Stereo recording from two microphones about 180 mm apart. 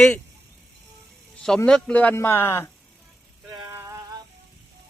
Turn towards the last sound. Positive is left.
turn(degrees=-15)  # may be behind; listen again after turning